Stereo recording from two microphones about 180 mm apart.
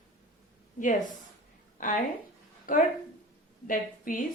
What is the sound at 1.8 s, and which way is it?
A woman's voice, 45° left (ahead or behind).